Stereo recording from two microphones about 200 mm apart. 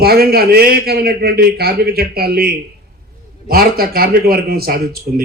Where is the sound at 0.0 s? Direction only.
50° right (ahead or behind).